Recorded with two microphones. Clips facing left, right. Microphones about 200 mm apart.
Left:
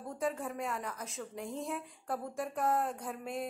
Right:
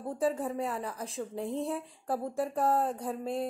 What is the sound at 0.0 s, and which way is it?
A woman's voice, 30° right (ahead or behind).